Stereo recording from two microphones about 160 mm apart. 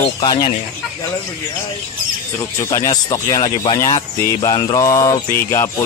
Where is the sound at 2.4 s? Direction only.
20° left (ahead or behind).